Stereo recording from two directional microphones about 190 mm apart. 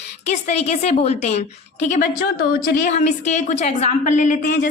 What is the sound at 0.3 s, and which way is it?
A woman's voice, 35° left (ahead or behind).